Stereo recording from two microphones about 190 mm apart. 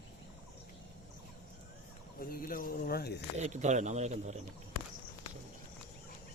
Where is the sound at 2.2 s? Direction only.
50° left (ahead or behind).